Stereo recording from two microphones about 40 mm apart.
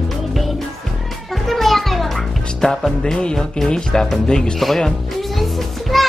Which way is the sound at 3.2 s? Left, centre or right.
Centre.